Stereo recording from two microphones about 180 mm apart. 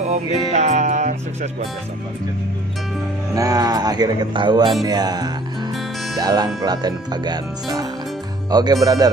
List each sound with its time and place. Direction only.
0.0 s music: 40° right (ahead or behind)
3.3 s speech: 20° right (ahead or behind)
4.8 s music: 20° right (ahead or behind)
6.1 s speech: 20° right (ahead or behind)